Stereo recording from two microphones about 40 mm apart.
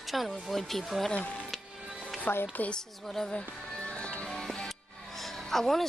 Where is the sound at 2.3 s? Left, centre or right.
Left.